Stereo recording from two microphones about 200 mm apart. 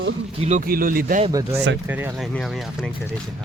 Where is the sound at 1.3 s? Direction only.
15° right (ahead or behind); by 2.9 s centre (ahead or behind).